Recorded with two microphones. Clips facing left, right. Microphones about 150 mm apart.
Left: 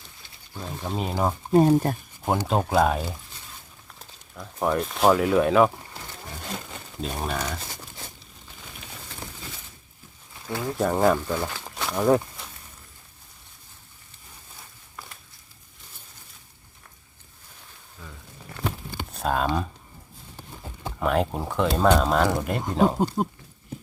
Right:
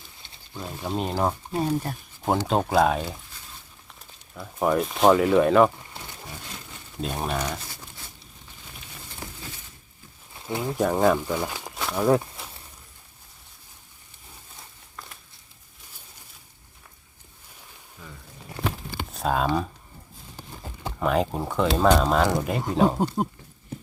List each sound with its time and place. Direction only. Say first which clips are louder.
0.6 s speech: right 1 dB; 5° right (ahead or behind)
1.5 s speech: left 8 dB; 45° left (ahead or behind)
2.4 s speech: even; centre (ahead or behind)
4.4 s speech: right 2 dB; centre (ahead or behind)
7.0 s speech: right 1 dB; centre (ahead or behind)
10.4 s speech: right 1 dB; 20° right (ahead or behind)
10.8 s speech: even; centre (ahead or behind)
11.2 s speech: even; 15° right (ahead or behind)
11.8 s a sound: left 1 dB; centre (ahead or behind)
18.0 s a sound: even; 10° right (ahead or behind)
18.6 s a sound: right 1 dB; 90° right
19.1 s speech: right 1 dB; centre (ahead or behind)
21.0 s speech: even; centre (ahead or behind)